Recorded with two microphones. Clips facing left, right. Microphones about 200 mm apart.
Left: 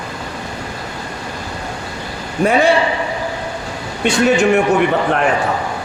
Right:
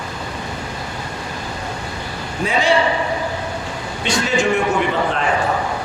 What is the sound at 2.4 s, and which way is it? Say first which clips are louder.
Speech: left 7 dB; 55° left (ahead or behind).